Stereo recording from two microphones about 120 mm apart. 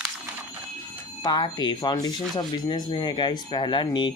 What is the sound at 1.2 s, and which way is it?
Speech, 40° left (ahead or behind).